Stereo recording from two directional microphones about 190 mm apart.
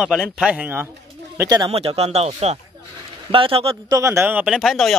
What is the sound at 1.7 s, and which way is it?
A man's voice, 30° right (ahead or behind).